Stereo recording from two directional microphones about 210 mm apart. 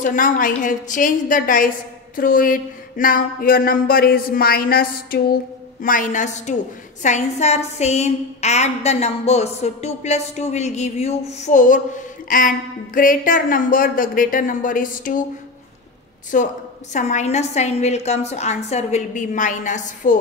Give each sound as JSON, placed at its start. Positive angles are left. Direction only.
{"t": 0.0, "sound": "a woman's voice", "side_deg": 40}
{"t": 2.1, "sound": "a sound", "side_deg": 40}
{"t": 5.8, "sound": "a woman's voice", "side_deg": 40}
{"t": 16.3, "sound": "a woman's voice", "side_deg": 40}